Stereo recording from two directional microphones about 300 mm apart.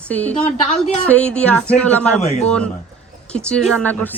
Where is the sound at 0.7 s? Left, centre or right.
Left.